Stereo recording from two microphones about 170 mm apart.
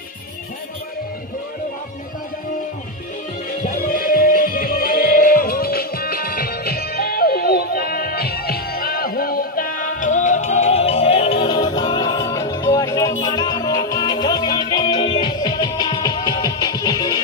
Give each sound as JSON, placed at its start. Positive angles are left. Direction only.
{"t": 3.6, "sound": "music", "side_deg": 55}